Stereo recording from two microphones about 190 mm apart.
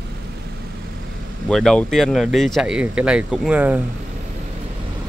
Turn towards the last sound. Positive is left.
turn(degrees=-10)  # may be behind; listen again after turning